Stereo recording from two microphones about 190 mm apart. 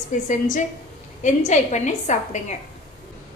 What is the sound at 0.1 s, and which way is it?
A woman's voice, 45° left (ahead or behind).